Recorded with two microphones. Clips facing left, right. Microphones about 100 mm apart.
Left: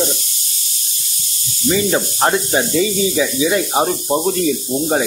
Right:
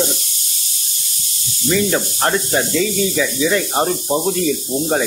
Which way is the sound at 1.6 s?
15° left (ahead or behind).